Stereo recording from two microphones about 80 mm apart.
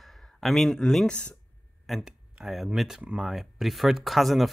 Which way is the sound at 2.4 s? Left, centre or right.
Centre.